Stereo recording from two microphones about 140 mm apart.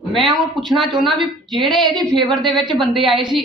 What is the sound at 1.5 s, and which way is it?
A woman's voice, centre (ahead or behind).